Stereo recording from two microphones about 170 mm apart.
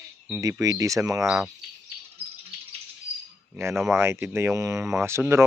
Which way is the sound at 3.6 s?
15° right (ahead or behind).